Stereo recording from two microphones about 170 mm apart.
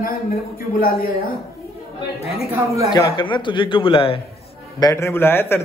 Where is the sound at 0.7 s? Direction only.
60° left (ahead or behind).